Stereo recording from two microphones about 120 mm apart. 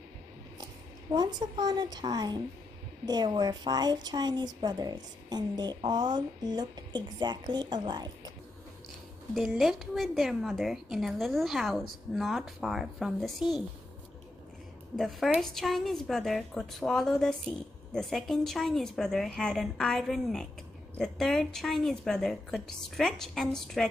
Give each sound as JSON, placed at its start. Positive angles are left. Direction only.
{"t": 1.1, "sound": "speech", "side_deg": -35}
{"t": 9.3, "sound": "a woman's voice", "side_deg": 0}
{"t": 15.0, "sound": "a woman's voice", "side_deg": 0}